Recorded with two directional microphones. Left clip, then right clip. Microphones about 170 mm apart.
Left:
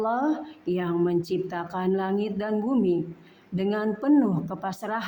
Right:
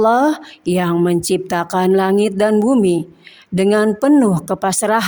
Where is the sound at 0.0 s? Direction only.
50° right (ahead or behind).